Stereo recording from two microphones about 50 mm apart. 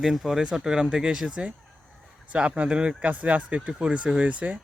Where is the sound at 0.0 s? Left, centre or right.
Centre; by 3.6 s right.